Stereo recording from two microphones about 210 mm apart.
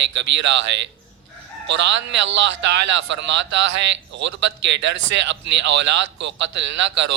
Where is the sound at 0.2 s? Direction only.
60° right (ahead or behind).